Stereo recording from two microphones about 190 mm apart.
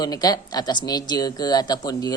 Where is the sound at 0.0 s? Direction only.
20° left (ahead or behind).